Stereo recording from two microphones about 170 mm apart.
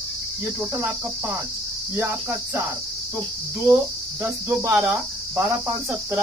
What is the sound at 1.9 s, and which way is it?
Cricket, 15° right (ahead or behind).